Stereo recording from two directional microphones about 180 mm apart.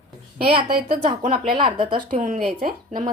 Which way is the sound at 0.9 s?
50° right (ahead or behind).